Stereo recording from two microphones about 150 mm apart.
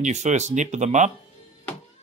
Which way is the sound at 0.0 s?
50° right (ahead or behind).